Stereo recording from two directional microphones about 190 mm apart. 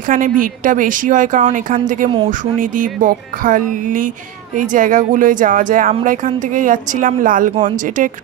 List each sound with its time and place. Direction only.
0.0 s speech: 45° right (ahead or behind)